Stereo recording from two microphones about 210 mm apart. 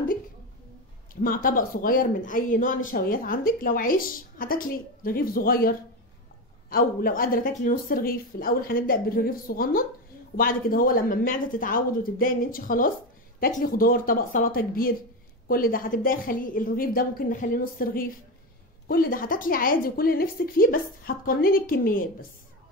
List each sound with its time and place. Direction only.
1.2 s speech: 40° left (ahead or behind)